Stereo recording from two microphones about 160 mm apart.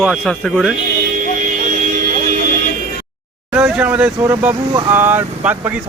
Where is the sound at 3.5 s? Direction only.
5° right (ahead or behind).